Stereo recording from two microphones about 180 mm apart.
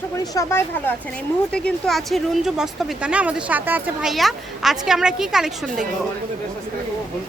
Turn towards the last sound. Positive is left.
turn(degrees=-5)  # may be behind; listen again after turning